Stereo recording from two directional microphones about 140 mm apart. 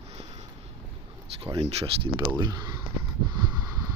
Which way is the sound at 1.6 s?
50° right (ahead or behind).